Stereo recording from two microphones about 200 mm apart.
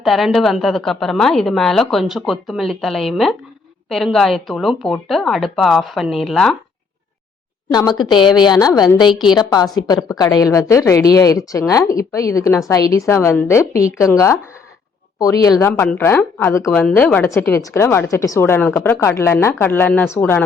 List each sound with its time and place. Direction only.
0.0 s a woman's voice: centre (ahead or behind)
7.7 s a woman's voice: 20° left (ahead or behind)